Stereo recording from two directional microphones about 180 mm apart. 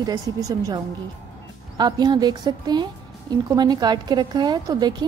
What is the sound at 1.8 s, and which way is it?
A woman's voice, 20° right (ahead or behind).